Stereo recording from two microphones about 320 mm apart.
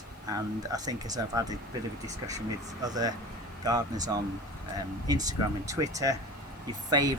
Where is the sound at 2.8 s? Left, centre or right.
Centre.